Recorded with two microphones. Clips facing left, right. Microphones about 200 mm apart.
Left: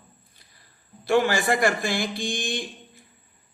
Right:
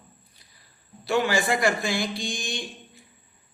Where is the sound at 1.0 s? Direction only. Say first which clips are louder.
Left 2 dB; 50° left (ahead or behind).